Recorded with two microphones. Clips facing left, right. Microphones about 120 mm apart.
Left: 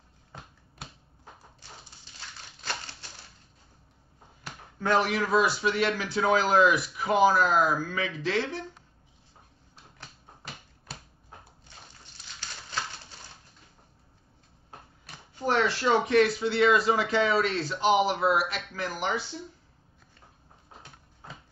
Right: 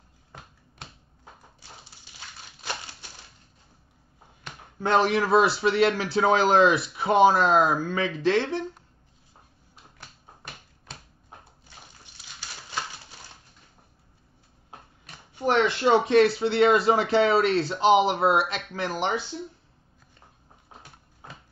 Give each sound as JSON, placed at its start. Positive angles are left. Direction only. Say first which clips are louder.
{"t": 2.1, "sound": "a sound", "louder": "right 1 dB", "side_deg": -10}
{"t": 4.7, "sound": "a man's voice", "louder": "right 3 dB", "side_deg": -25}
{"t": 15.3, "sound": "a man's voice", "louder": "right 3 dB", "side_deg": -20}